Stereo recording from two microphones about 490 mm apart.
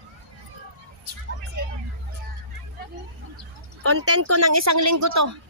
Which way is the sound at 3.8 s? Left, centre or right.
Right.